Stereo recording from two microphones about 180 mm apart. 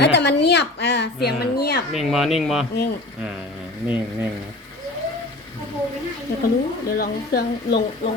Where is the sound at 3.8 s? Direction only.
10° right (ahead or behind).